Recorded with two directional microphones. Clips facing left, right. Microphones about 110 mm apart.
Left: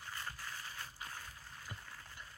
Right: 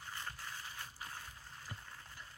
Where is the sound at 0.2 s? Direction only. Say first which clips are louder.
Even; 15° right (ahead or behind).